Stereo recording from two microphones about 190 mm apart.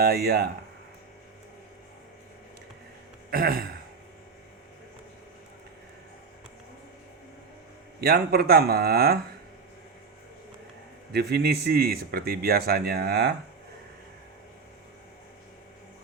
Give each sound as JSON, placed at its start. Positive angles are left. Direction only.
{"t": 0.0, "sound": "speech", "side_deg": -55}
{"t": 3.2, "sound": "gasp", "side_deg": -50}
{"t": 8.0, "sound": "speech", "side_deg": -55}
{"t": 11.1, "sound": "speech", "side_deg": -60}